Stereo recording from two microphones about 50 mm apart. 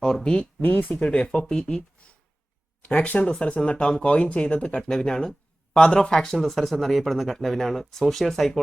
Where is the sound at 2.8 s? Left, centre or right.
Left.